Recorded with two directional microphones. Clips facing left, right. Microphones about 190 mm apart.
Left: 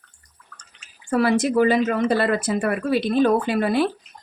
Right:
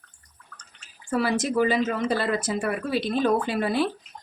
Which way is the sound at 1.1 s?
65° left (ahead or behind).